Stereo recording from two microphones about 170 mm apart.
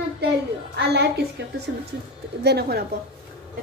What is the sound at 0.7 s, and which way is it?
Speech, 75° right (ahead or behind).